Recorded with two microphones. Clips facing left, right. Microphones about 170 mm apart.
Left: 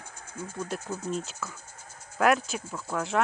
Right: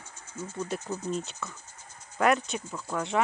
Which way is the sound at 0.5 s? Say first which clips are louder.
Right 1 dB; centre (ahead or behind).